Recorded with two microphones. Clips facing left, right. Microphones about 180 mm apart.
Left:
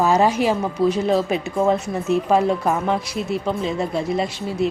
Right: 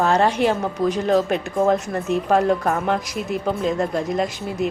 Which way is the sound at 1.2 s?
Centre (ahead or behind).